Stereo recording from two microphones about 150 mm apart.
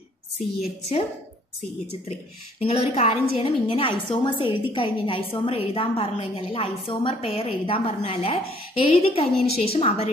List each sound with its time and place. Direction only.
0.6 s a woman's voice: 50° left (ahead or behind)
2.6 s a woman's voice: 45° left (ahead or behind)